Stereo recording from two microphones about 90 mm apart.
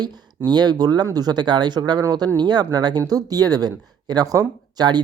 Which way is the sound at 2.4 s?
55° right (ahead or behind).